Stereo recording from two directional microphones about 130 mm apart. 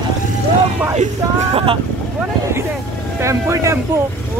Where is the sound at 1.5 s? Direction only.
45° right (ahead or behind).